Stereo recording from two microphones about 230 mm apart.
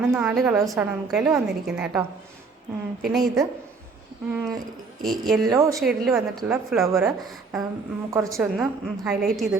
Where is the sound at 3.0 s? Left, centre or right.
Centre.